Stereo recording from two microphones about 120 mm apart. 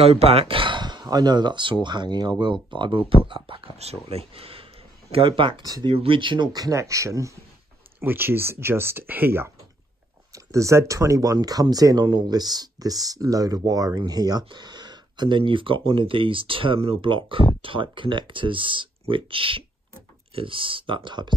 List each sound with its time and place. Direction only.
0.0 s speech: 55° right (ahead or behind)
3.7 s speech: 60° right (ahead or behind); by 21.3 s 40° right (ahead or behind)